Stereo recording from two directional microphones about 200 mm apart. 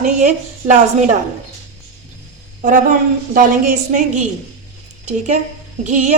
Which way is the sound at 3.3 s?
40° right (ahead or behind).